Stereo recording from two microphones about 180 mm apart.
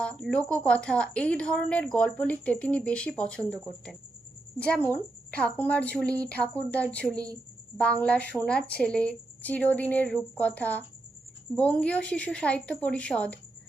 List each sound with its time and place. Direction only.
0.0 s a woman's voice: 5° left (ahead or behind)